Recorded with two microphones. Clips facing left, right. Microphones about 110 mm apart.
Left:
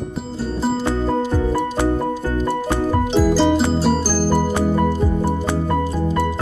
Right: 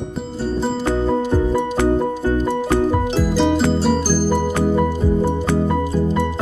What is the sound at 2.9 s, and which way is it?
Music, 5° right (ahead or behind).